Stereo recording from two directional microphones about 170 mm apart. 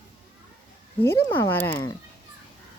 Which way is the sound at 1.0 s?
15° left (ahead or behind).